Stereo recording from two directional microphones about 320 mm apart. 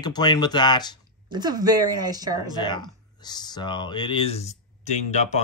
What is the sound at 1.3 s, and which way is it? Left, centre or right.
Speech, centre.